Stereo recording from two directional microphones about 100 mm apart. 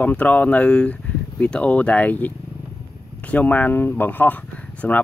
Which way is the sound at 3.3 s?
15° left (ahead or behind).